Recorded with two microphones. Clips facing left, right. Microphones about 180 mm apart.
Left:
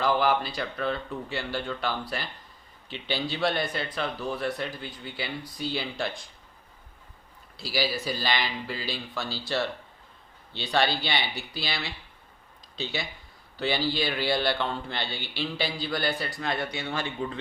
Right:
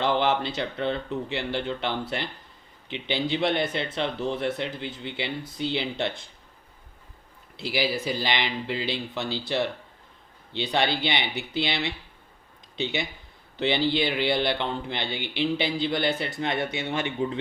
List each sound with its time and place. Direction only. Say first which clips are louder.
0.0 s a man's voice: right 1 dB; 25° right (ahead or behind)
7.5 s a man's voice: right 2 dB; 20° right (ahead or behind)
10.5 s a man's voice: right 1 dB; 20° right (ahead or behind)